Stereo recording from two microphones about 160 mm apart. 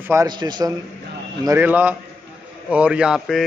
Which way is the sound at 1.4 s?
15° right (ahead or behind).